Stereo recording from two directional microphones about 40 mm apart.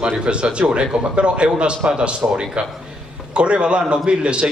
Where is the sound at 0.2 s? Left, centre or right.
Right.